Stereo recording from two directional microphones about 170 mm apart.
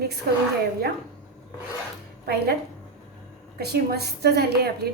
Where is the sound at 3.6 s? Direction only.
70° right (ahead or behind).